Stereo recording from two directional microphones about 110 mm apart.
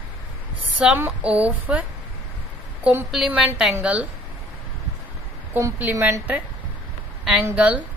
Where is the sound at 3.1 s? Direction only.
Centre (ahead or behind).